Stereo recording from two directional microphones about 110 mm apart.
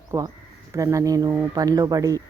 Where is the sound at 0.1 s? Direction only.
30° right (ahead or behind).